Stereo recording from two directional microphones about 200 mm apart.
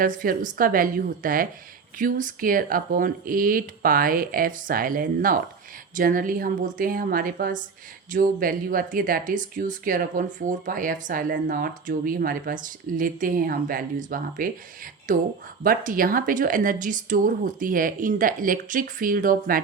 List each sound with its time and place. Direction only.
0.0 s speech: 45° right (ahead or behind)
15.6 s speech: 45° right (ahead or behind)